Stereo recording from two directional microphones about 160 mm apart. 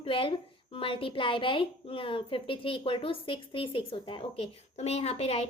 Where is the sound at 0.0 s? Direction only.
35° left (ahead or behind).